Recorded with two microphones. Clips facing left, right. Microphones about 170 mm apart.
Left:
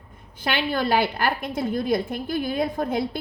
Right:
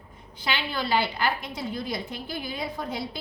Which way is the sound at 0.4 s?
50° left (ahead or behind).